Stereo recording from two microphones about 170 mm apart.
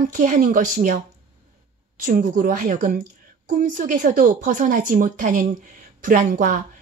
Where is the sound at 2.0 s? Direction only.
50° right (ahead or behind).